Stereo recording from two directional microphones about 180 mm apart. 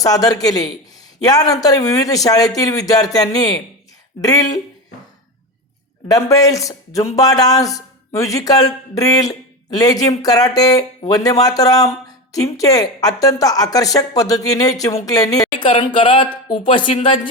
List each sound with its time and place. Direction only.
0.0 s speech: 20° left (ahead or behind)
6.1 s speech: 20° left (ahead or behind)